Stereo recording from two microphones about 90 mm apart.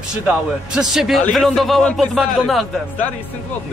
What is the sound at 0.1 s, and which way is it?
A man's voice, 10° right (ahead or behind).